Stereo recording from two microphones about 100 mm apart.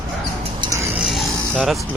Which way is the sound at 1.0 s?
5° right (ahead or behind).